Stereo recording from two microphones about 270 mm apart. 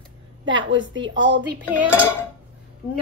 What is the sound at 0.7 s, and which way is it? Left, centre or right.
Speech, right.